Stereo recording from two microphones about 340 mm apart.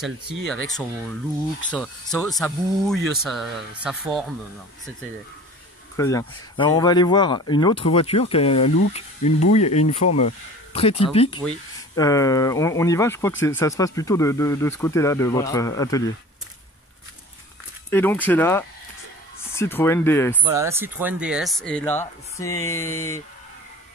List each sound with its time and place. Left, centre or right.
0.5 s speech: centre
5.9 s speech: centre
17.8 s speech: centre
20.5 s speech: centre
22.8 s speech: left